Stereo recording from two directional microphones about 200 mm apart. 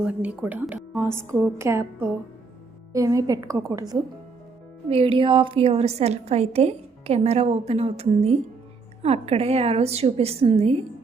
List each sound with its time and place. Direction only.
0.0 s a woman's voice: 5° right (ahead or behind)
4.9 s a woman's voice: 30° right (ahead or behind)